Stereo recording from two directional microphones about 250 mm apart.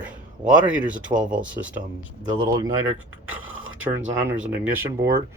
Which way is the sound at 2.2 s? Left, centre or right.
Centre.